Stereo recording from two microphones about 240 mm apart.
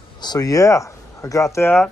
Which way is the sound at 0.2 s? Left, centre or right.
Centre.